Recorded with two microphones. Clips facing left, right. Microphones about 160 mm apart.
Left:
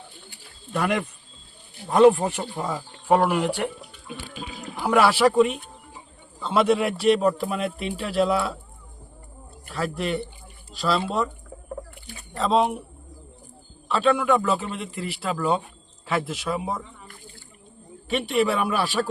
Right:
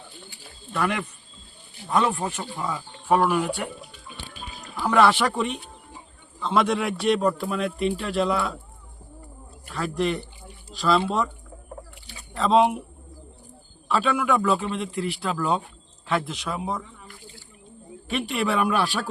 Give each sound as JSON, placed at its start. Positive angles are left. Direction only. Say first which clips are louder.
{"t": 0.7, "sound": "speech", "louder": "left 2 dB", "side_deg": 35}
{"t": 4.1, "sound": "music", "louder": "left 7 dB", "side_deg": 90}
{"t": 4.9, "sound": "a man's voice", "louder": "left 1 dB", "side_deg": 5}
{"t": 9.7, "sound": "a man's voice", "louder": "right 1 dB", "side_deg": 0}
{"t": 12.4, "sound": "a man's voice", "louder": "right 2 dB", "side_deg": 0}
{"t": 13.8, "sound": "a man's voice", "louder": "left 2 dB", "side_deg": 0}
{"t": 18.1, "sound": "a man's voice", "louder": "left 3 dB", "side_deg": 0}